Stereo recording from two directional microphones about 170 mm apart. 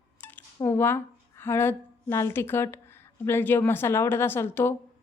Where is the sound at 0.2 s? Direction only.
10° left (ahead or behind).